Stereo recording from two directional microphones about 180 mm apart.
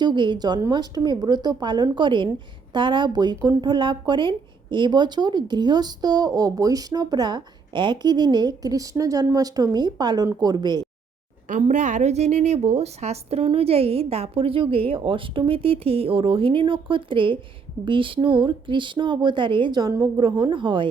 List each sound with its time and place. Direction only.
0.0 s speech: 25° right (ahead or behind)
11.4 s a woman's voice: 45° right (ahead or behind); by 20.8 s 25° right (ahead or behind)